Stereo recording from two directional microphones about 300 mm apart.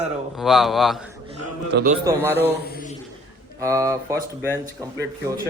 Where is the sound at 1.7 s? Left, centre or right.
Right.